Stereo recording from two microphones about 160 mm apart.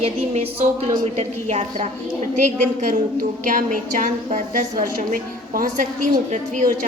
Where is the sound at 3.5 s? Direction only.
55° right (ahead or behind).